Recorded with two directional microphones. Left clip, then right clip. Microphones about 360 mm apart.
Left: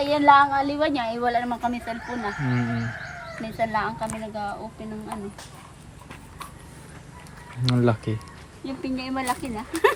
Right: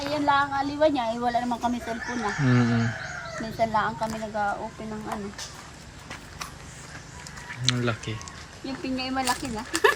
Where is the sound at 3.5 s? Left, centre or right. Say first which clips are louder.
Right 1 dB; centre.